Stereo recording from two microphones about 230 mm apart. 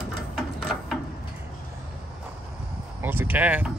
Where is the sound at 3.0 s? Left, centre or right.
Centre.